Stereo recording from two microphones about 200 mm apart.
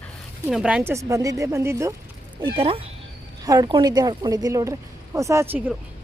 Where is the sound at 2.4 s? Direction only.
25° right (ahead or behind); by 5.7 s 10° right (ahead or behind).